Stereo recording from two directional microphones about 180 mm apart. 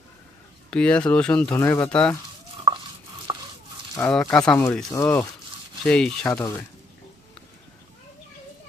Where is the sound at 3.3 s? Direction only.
25° right (ahead or behind).